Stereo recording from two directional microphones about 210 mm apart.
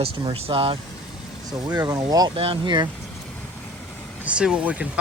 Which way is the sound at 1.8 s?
20° right (ahead or behind).